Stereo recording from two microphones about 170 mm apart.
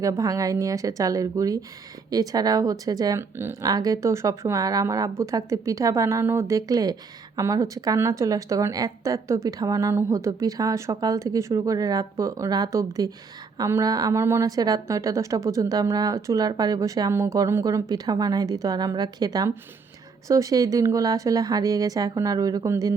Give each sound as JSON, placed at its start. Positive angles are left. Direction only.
{"t": 0.0, "sound": "a woman's voice", "side_deg": -20}